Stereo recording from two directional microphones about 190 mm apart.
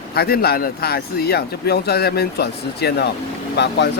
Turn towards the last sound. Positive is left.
turn(degrees=65)  # may be behind; listen again after turning